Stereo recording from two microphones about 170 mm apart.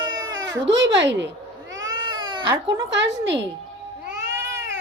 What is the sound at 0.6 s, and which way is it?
Speech, 90° right.